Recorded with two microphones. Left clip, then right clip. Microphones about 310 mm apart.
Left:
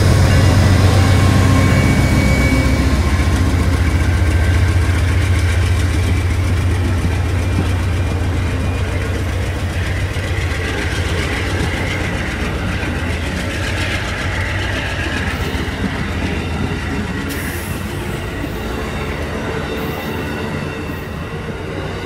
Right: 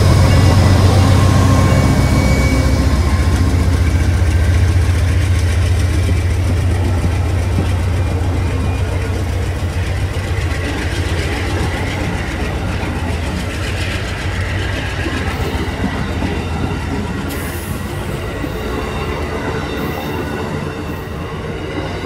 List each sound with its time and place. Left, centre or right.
0.9 s vehicle: right
2.1 s vehicle: centre